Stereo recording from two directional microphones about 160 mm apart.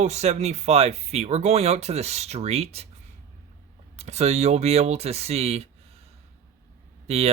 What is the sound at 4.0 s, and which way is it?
Speech, 45° right (ahead or behind).